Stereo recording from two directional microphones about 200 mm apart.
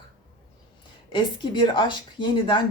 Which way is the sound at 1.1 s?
25° left (ahead or behind).